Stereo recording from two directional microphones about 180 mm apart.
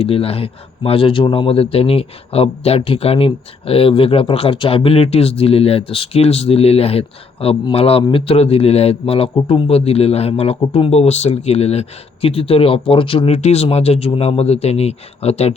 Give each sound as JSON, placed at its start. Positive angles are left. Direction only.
{"t": 0.0, "sound": "a man's voice", "side_deg": 35}